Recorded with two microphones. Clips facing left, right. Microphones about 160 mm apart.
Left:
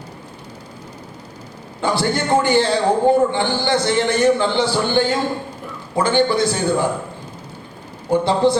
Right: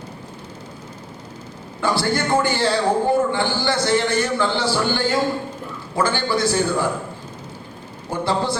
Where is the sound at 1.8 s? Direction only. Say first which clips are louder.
Left 1 dB; 20° left (ahead or behind).